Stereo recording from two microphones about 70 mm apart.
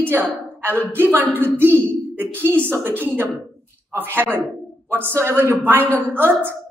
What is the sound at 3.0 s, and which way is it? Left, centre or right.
A woman's voice, right.